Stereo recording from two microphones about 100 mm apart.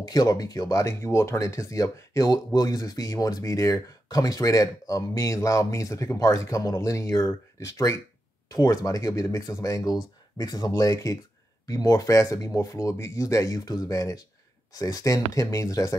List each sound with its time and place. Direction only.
0.0 s speech: 40° left (ahead or behind)